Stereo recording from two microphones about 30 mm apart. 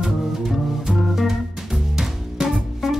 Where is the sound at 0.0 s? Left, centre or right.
Centre.